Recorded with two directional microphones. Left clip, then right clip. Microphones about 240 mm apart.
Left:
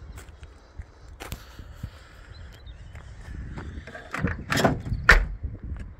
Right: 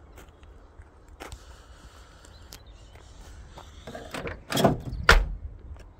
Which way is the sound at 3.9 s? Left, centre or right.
Right.